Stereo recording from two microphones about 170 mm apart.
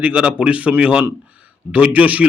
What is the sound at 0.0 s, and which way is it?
A man's voice, 5° right (ahead or behind).